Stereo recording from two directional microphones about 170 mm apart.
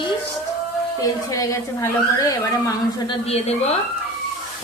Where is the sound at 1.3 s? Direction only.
20° left (ahead or behind).